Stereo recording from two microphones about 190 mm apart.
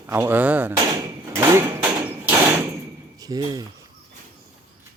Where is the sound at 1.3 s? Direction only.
15° right (ahead or behind).